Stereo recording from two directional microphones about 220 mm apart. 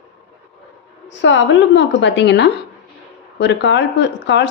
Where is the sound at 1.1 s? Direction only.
55° left (ahead or behind).